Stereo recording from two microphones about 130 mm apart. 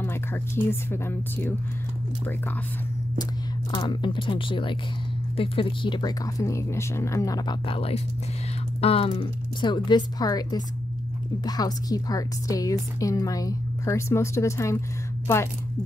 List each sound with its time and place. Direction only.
0.0 s speech: 15° left (ahead or behind)
3.7 s a woman's voice: 35° left (ahead or behind)